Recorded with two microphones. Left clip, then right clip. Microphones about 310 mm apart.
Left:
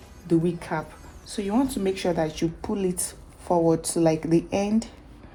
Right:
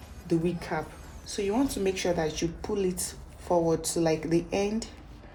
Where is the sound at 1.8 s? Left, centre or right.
Centre.